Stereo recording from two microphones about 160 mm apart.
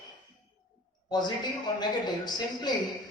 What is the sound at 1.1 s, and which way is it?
Speech, 25° left (ahead or behind).